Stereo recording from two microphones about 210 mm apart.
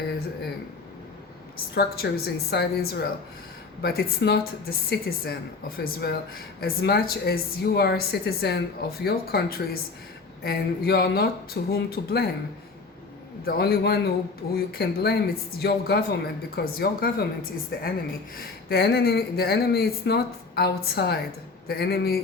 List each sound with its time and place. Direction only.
1.7 s speech: 50° left (ahead or behind)
13.4 s speech: 45° left (ahead or behind)